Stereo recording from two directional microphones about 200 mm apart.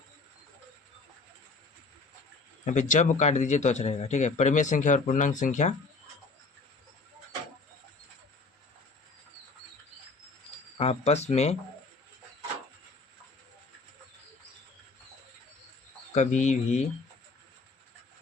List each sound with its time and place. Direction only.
2.6 s a man's voice: 40° left (ahead or behind)
10.8 s a man's voice: 30° left (ahead or behind)
16.1 s a man's voice: 35° left (ahead or behind)